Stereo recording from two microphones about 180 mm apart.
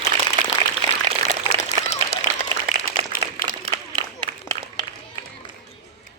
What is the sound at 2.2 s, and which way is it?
Applause, 45° left (ahead or behind).